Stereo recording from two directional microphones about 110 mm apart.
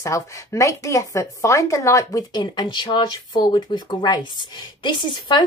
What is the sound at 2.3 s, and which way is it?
Speech, 40° left (ahead or behind).